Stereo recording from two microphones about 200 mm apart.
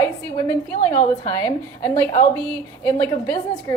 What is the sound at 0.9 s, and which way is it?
Speech, 40° left (ahead or behind).